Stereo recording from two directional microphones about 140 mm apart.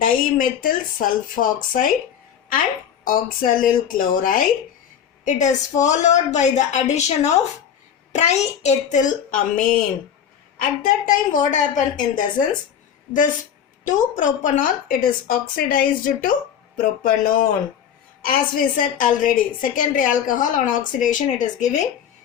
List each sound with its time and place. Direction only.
0.0 s speech: 85° left
3.0 s speech: 90° left
5.2 s a woman's voice: 60° left (ahead or behind)
13.8 s a woman's voice: 65° left (ahead or behind)